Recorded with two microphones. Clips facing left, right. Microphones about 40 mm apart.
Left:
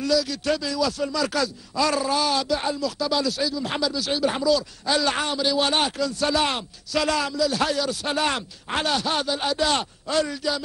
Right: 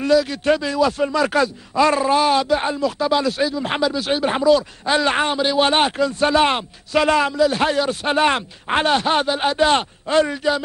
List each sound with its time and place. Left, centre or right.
0.0 s speech: right